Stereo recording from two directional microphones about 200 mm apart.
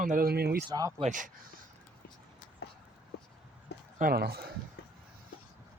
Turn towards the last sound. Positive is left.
turn(degrees=-50)  # may be behind; listen again after turning